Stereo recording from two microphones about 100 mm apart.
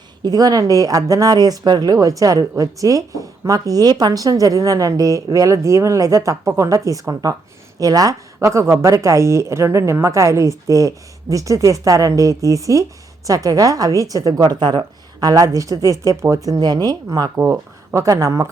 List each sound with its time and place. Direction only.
0.3 s speech: 40° right (ahead or behind)
17.3 s speech: 25° right (ahead or behind)